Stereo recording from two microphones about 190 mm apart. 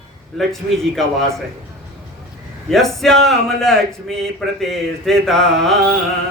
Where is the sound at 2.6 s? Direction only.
Centre (ahead or behind).